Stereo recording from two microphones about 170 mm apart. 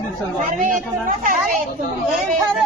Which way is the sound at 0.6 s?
50° right (ahead or behind).